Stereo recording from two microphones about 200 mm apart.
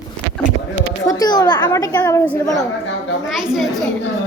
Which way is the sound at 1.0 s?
20° left (ahead or behind).